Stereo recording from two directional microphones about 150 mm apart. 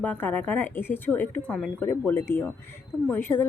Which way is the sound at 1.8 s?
15° left (ahead or behind).